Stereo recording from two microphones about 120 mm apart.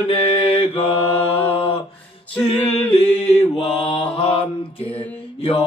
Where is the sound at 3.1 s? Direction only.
55° left (ahead or behind).